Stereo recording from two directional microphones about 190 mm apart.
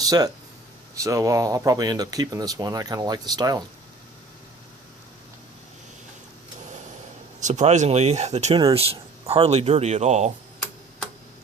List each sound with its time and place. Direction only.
0.9 s speech: 15° right (ahead or behind)
7.3 s speech: 40° right (ahead or behind)